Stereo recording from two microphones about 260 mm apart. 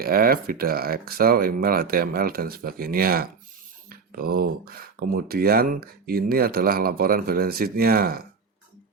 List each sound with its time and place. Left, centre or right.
0.0 s speech: right